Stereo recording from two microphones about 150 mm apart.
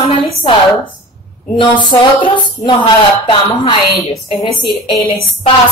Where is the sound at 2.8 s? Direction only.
30° left (ahead or behind).